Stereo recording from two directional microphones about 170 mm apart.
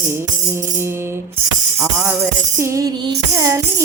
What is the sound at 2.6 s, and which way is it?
Music, 20° right (ahead or behind).